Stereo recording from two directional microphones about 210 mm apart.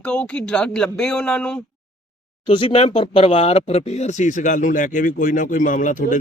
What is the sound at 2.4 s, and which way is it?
Speech, 25° left (ahead or behind).